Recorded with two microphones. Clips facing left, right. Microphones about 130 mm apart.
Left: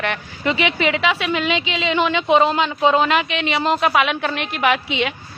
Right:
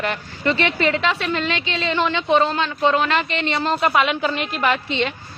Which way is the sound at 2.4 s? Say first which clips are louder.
Left 2 dB; 20° left (ahead or behind).